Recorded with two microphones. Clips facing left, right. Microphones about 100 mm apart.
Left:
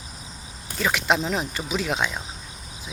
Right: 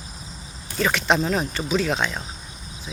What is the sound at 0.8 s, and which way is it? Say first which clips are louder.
Speech: right 2 dB; 10° left (ahead or behind).